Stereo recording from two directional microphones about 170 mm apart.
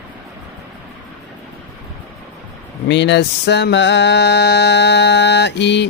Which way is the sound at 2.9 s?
90° left.